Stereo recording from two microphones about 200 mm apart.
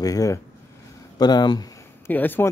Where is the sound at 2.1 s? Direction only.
10° left (ahead or behind).